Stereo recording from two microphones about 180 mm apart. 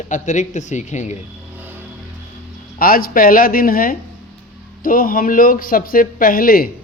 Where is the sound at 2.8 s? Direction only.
55° left (ahead or behind).